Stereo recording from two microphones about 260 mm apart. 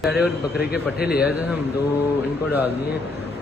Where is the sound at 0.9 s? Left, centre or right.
Left.